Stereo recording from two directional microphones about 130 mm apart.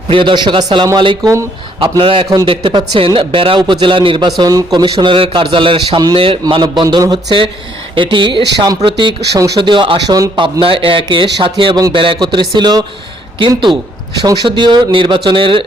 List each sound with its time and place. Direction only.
0.1 s speech: 40° right (ahead or behind)
1.2 s speech: 25° right (ahead or behind)
1.8 s a man's voice: 40° right (ahead or behind)
4.4 s a man's voice: 30° right (ahead or behind)